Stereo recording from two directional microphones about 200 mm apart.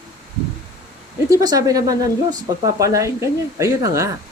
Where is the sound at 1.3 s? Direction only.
20° right (ahead or behind).